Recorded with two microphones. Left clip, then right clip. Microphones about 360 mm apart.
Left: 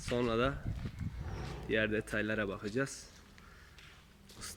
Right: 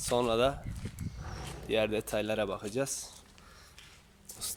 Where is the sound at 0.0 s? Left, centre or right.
Centre.